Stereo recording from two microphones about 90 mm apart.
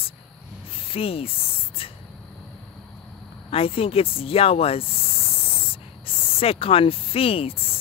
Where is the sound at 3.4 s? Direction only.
90° left.